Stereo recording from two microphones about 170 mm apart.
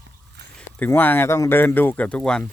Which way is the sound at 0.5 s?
10° left (ahead or behind).